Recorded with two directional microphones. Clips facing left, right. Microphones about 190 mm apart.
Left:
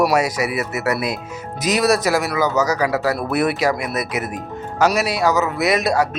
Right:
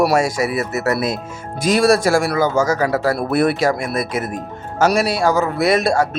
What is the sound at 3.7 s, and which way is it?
Speech, 45° right (ahead or behind).